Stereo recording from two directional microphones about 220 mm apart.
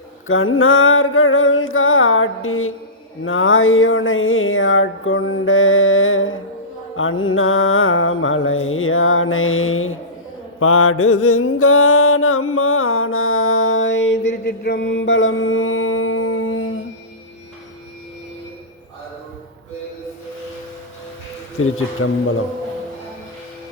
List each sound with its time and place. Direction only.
0.3 s a sound: 65° left (ahead or behind)
10.6 s mantra: 70° left (ahead or behind)
21.6 s speech: 75° left (ahead or behind)